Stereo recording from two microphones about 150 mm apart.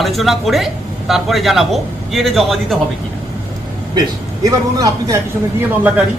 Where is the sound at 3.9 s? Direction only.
25° right (ahead or behind).